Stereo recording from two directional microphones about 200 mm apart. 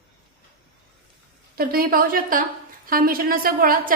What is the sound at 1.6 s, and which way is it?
A woman's voice, 45° right (ahead or behind).